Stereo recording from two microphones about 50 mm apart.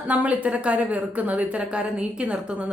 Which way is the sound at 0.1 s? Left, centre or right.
Right.